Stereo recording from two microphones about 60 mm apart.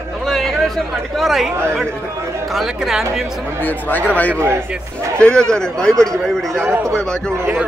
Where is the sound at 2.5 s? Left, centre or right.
Centre.